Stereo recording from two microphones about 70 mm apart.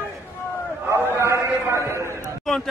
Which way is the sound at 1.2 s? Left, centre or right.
Right.